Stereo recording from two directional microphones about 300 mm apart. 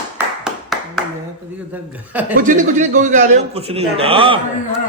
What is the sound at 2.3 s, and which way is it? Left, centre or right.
A man's voice, right.